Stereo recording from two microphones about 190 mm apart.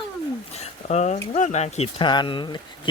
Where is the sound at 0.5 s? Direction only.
35° left (ahead or behind).